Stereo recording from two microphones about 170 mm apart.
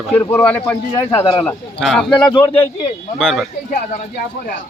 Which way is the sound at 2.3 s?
25° left (ahead or behind).